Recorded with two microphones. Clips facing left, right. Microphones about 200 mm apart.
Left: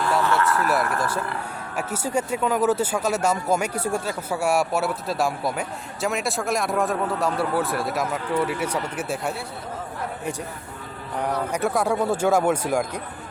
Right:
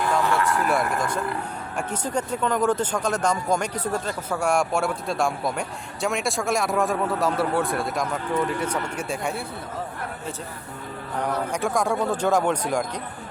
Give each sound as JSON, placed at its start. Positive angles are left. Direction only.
{"t": 0.0, "sound": "vehicle", "side_deg": -15}
{"t": 1.7, "sound": "speech", "side_deg": 10}
{"t": 11.5, "sound": "speech", "side_deg": 5}